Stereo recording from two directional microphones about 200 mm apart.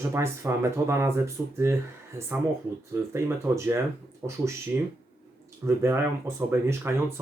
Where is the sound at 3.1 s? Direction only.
15° right (ahead or behind).